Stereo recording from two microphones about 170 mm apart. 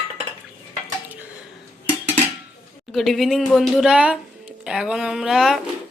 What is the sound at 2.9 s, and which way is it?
Speech, centre (ahead or behind).